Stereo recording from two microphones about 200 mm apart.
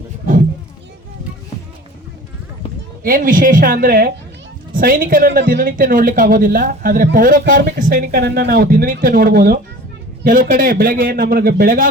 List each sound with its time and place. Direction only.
3.0 s speech: 45° right (ahead or behind)